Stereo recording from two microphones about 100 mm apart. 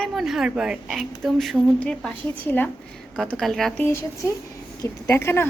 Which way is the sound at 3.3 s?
5° left (ahead or behind).